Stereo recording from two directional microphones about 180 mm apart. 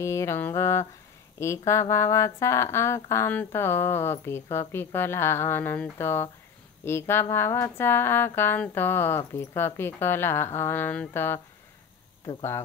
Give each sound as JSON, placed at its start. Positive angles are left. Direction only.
{"t": 0.0, "sound": "speech", "side_deg": 15}